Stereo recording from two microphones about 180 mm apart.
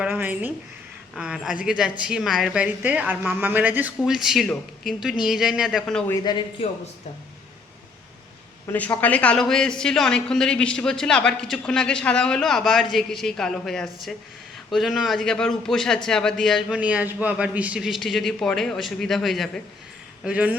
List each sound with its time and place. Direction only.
0.0 s speech: 10° right (ahead or behind)
6.1 s speech: 25° left (ahead or behind)
8.6 s speech: 10° left (ahead or behind); by 20.6 s 5° right (ahead or behind)